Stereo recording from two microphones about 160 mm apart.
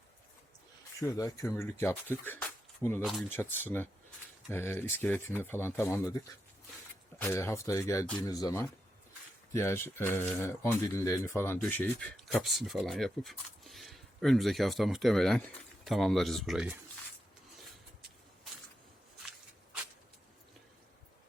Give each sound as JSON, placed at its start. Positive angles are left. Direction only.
{"t": 1.0, "sound": "speech", "side_deg": 20}
{"t": 3.0, "sound": "speech", "side_deg": 0}
{"t": 3.6, "sound": "speech", "side_deg": 10}